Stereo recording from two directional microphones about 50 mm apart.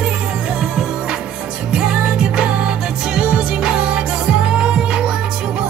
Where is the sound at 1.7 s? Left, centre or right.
Centre.